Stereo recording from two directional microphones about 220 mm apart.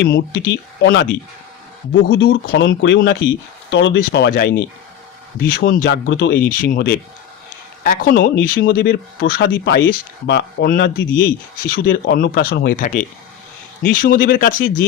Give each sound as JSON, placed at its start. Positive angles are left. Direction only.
{"t": 0.0, "sound": "speech", "side_deg": 50}
{"t": 6.5, "sound": "speech", "side_deg": 40}